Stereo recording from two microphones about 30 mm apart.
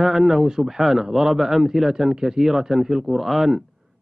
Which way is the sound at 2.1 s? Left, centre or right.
Right.